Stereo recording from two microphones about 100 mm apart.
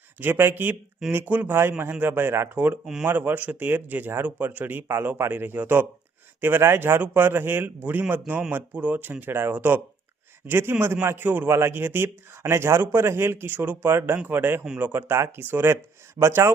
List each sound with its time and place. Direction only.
0.2 s speech: 20° right (ahead or behind)
2.8 s speech: 5° right (ahead or behind)
3.1 s speech: 20° right (ahead or behind)